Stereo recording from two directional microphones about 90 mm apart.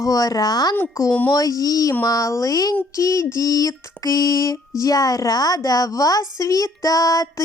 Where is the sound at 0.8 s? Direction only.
35° left (ahead or behind).